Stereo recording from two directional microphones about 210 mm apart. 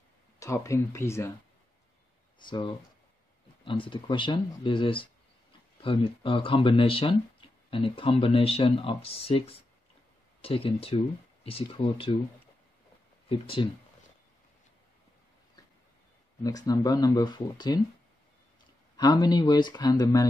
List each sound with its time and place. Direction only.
0.4 s speech: 15° left (ahead or behind)
2.3 s speech: 25° left (ahead or behind)
13.3 s speech: 25° left (ahead or behind)
16.4 s speech: 15° left (ahead or behind)
18.9 s speech: 20° left (ahead or behind)